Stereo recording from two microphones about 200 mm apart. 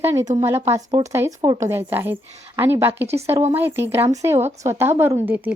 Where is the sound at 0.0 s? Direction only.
15° right (ahead or behind).